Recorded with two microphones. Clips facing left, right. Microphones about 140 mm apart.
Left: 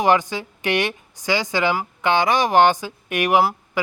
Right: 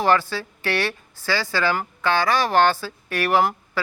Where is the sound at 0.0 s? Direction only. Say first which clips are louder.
Left 2 dB; 15° left (ahead or behind).